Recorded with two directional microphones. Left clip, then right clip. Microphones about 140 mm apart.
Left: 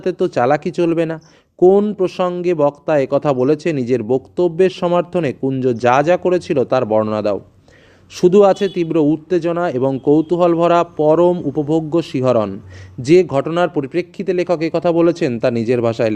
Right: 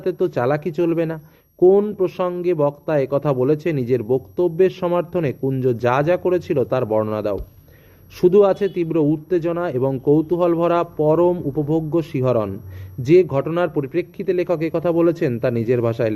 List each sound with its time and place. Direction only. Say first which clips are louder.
0.0 s a man's voice: left 4 dB; 40° left (ahead or behind)